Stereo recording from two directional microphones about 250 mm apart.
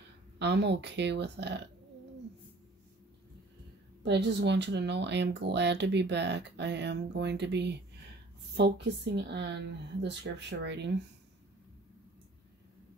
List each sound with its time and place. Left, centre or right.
0.4 s speech: right
4.0 s speech: right